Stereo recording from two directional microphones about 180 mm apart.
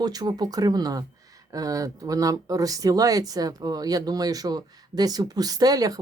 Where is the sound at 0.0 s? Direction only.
20° right (ahead or behind).